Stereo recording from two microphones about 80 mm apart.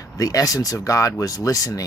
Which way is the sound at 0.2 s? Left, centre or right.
Left.